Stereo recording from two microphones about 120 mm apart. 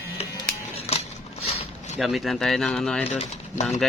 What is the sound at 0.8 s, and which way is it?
Scissors, 60° left (ahead or behind).